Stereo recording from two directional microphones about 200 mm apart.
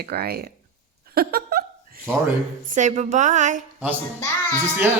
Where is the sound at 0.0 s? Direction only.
50° right (ahead or behind).